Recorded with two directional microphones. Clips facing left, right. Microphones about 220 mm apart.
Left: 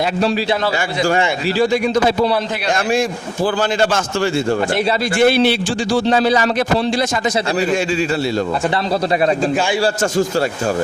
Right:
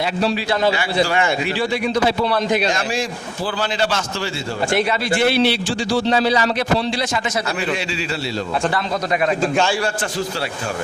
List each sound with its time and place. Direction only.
1.0 s a man's voice: 45° left (ahead or behind)
3.4 s a man's voice: 50° left (ahead or behind)
9.8 s a man's voice: 45° left (ahead or behind)